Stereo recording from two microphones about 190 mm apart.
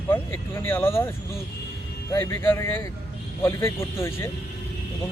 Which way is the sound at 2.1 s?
15° left (ahead or behind).